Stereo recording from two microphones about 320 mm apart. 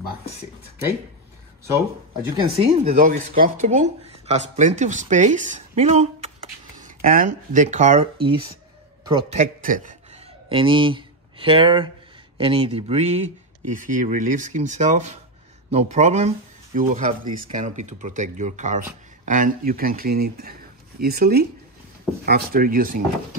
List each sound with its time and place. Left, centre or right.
1.6 s speech: centre; by 23.0 s right